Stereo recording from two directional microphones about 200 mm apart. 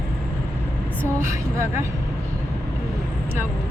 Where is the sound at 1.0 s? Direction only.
15° right (ahead or behind).